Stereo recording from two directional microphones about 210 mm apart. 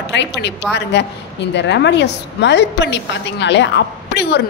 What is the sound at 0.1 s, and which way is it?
A woman's voice, 55° left (ahead or behind).